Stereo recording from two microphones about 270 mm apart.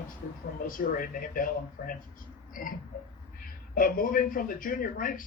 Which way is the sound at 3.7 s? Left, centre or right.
Left.